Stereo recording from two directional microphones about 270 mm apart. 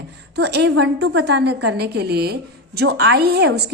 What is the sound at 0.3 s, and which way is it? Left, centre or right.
A woman's voice, right.